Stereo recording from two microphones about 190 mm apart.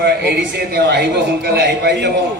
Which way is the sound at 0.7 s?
60° right (ahead or behind).